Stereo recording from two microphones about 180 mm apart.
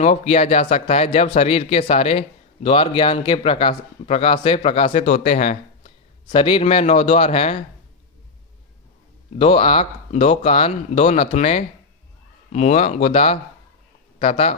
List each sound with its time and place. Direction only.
0.0 s a man's voice: 40° left (ahead or behind)
6.3 s a man's voice: 30° left (ahead or behind)
9.4 s a man's voice: 30° left (ahead or behind)